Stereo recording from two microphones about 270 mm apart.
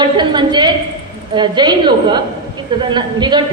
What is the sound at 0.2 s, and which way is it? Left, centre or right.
A woman's voice, centre.